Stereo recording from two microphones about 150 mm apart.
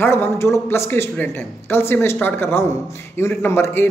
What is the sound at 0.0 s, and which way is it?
Speech, 15° left (ahead or behind).